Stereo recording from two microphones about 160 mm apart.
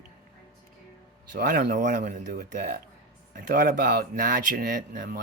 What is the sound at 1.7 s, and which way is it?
Speech, 50° right (ahead or behind).